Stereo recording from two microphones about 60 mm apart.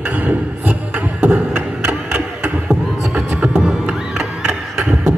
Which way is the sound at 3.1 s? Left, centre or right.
Centre.